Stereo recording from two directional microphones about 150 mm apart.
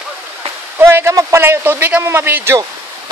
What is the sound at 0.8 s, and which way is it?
Speech, 15° right (ahead or behind).